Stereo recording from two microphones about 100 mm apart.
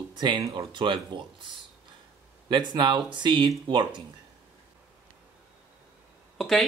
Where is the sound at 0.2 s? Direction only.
40° right (ahead or behind).